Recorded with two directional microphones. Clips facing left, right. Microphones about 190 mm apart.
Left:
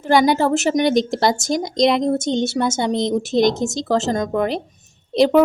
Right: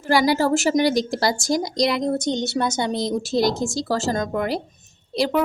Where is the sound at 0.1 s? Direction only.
20° left (ahead or behind).